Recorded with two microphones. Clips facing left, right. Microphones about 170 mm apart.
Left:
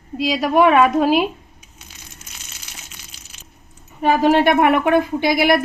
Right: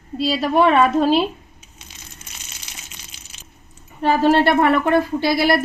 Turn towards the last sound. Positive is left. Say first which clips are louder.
# left 1 dB
turn(degrees=15)  # may be behind; listen again after turning